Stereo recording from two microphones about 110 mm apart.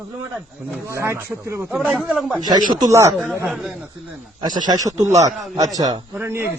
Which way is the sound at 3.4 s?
Centre (ahead or behind).